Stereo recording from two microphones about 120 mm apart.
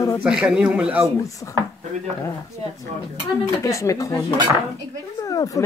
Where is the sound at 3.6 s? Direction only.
25° left (ahead or behind).